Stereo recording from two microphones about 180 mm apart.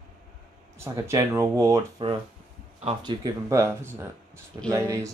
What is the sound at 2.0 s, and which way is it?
Speech, 25° right (ahead or behind).